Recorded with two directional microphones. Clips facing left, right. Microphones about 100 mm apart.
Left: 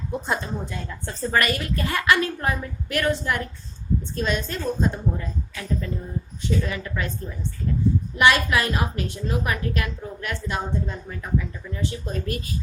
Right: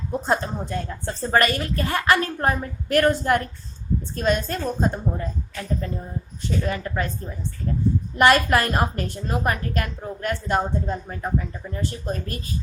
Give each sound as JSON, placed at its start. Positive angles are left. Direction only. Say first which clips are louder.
{"t": 0.7, "sound": "a woman's voice", "louder": "right 5 dB", "side_deg": -35}
{"t": 8.1, "sound": "a woman's voice", "louder": "right 3 dB", "side_deg": -45}